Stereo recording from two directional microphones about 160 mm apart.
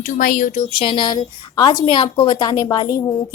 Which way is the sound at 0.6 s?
35° left (ahead or behind).